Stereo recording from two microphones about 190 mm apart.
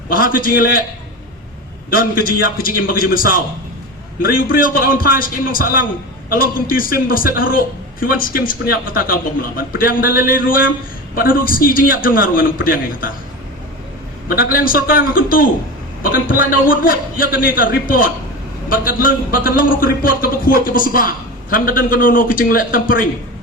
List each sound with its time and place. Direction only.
0.1 s speech: 50° left (ahead or behind)
1.9 s speech: 50° left (ahead or behind)
14.3 s speech: 50° left (ahead or behind)